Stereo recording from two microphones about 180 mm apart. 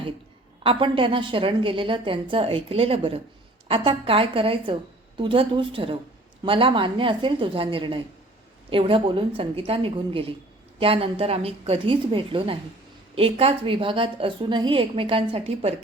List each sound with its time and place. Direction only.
0.6 s a woman's voice: 30° right (ahead or behind)